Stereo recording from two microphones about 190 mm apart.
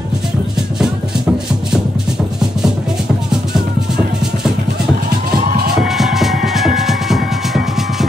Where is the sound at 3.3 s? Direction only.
5° right (ahead or behind).